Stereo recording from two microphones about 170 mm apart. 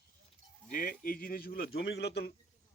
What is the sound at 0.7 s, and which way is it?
Speech, 55° left (ahead or behind).